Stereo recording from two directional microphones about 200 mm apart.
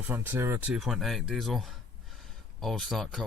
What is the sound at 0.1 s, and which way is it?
Speech, 10° right (ahead or behind).